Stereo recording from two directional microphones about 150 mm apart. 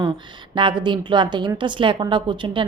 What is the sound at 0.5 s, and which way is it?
A woman's voice, 30° right (ahead or behind).